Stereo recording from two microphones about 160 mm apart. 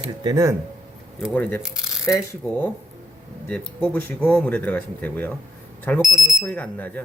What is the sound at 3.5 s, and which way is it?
Speech, 10° left (ahead or behind).